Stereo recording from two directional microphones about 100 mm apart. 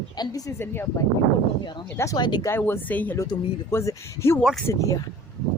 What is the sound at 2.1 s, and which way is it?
Speech, 45° left (ahead or behind).